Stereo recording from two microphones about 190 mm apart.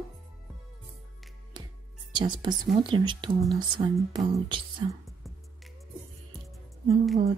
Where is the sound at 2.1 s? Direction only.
25° right (ahead or behind).